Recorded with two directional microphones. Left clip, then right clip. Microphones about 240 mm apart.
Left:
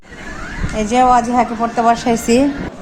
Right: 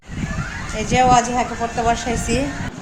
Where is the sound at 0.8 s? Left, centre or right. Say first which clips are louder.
Left 3 dB; left.